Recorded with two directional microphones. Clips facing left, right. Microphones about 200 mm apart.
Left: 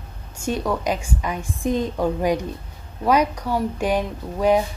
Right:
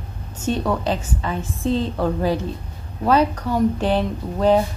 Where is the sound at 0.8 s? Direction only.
10° left (ahead or behind).